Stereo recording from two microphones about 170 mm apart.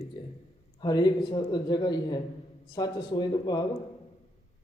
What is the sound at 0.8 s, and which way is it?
A man's voice, 25° left (ahead or behind).